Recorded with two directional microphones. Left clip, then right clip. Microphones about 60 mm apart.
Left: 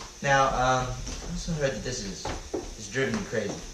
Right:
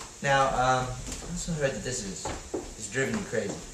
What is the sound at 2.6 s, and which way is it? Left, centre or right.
Drawer open or close, centre.